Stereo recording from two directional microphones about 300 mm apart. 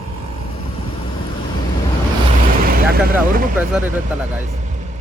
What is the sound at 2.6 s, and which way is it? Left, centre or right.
Speech, right.